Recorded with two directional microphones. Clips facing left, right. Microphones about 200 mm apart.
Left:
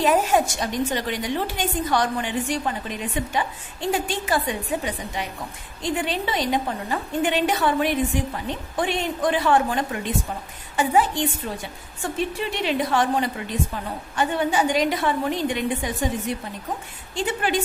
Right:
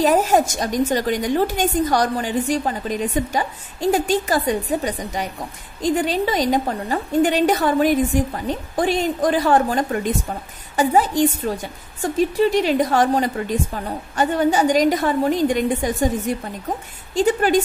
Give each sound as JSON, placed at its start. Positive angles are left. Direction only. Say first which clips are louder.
{"t": 0.0, "sound": "a woman's voice", "louder": "right 3 dB", "side_deg": -40}